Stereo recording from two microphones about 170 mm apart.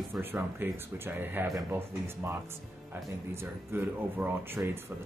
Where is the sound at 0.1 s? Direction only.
15° right (ahead or behind).